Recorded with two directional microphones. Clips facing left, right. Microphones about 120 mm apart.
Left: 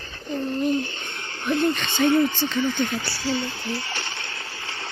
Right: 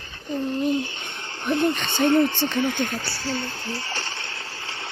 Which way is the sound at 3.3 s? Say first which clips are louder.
Left 3 dB; 40° right (ahead or behind).